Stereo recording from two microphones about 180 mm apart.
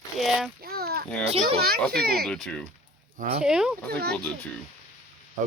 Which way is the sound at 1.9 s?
60° right (ahead or behind).